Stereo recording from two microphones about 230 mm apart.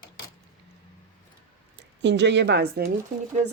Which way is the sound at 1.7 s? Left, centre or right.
Right.